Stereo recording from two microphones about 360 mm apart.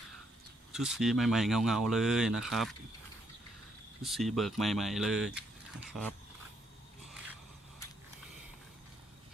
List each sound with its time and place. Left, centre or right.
0.7 s speech: centre
4.0 s speech: centre